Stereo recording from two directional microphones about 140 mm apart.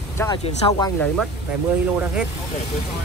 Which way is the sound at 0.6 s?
35° left (ahead or behind).